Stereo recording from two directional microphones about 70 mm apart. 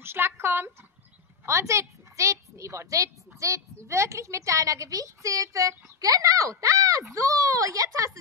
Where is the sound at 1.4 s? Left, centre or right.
Right.